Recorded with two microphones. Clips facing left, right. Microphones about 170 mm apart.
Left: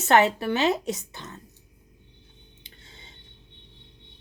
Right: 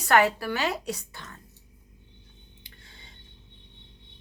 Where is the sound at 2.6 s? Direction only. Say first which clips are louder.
Left 3 dB; 25° left (ahead or behind).